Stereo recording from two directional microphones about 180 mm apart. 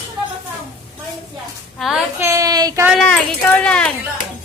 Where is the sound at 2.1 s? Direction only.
15° right (ahead or behind).